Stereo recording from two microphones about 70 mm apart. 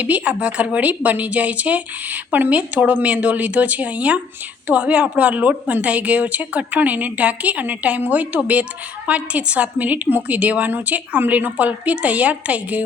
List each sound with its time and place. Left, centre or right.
0.0 s a woman's voice: centre